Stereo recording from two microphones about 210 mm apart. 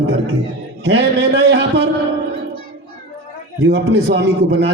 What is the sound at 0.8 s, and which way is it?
Speech, 55° right (ahead or behind).